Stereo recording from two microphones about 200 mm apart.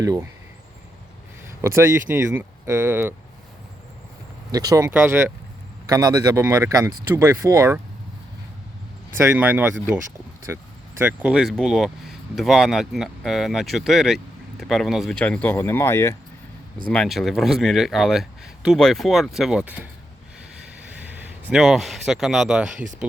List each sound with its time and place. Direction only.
0.0 s speech: 15° right (ahead or behind)
1.6 s speech: 15° right (ahead or behind)
4.5 s speech: 20° right (ahead or behind)
9.1 s speech: 10° right (ahead or behind); by 16.1 s 15° left (ahead or behind)
16.9 s speech: centre (ahead or behind)
21.5 s speech: centre (ahead or behind)
22.7 s speech: 40° right (ahead or behind)